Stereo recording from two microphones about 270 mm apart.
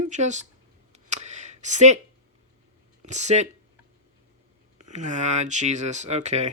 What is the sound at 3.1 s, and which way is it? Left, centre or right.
Speech, right.